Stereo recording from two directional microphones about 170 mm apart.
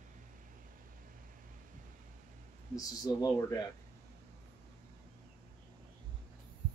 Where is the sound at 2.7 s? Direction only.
20° left (ahead or behind).